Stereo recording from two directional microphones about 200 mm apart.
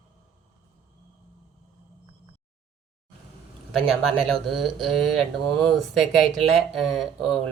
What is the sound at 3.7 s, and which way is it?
Speech, centre (ahead or behind).